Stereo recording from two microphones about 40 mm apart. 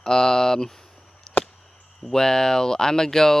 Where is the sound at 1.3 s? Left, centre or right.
Centre.